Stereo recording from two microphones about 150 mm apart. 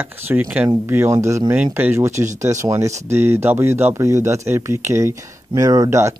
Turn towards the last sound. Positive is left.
turn(degrees=-20)  # may be behind; listen again after turning